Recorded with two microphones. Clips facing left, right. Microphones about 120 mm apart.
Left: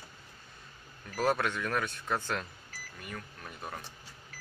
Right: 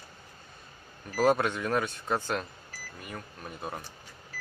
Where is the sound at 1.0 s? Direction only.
25° right (ahead or behind).